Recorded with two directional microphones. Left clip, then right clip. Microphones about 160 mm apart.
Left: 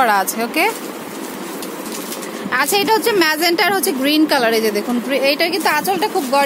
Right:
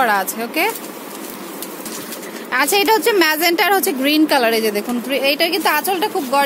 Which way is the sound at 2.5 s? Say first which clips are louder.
Right 1 dB; 10° right (ahead or behind).